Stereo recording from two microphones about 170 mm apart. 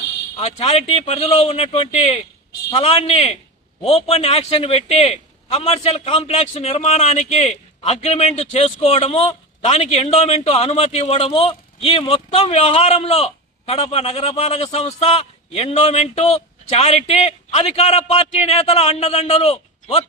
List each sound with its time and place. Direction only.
0.3 s speech: 40° left (ahead or behind)